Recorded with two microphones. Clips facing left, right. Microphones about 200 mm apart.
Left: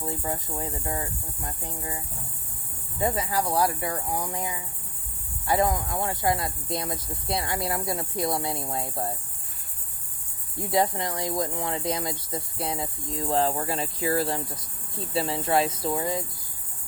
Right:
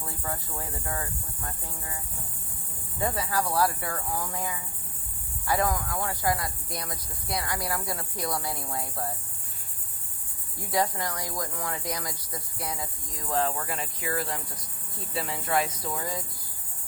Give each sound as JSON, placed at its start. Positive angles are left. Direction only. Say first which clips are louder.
{"t": 0.0, "sound": "speech", "louder": "left 5 dB", "side_deg": 20}
{"t": 3.0, "sound": "speech", "louder": "left 2 dB", "side_deg": 20}
{"t": 10.6, "sound": "speech", "louder": "left 3 dB", "side_deg": 25}